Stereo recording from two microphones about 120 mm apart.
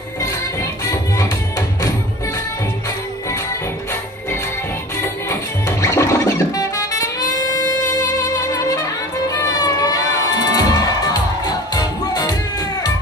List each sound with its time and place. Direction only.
0.2 s music: 30° left (ahead or behind)
5.0 s music: 25° left (ahead or behind)